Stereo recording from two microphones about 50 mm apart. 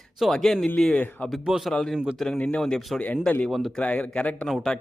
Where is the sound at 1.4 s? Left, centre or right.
Centre.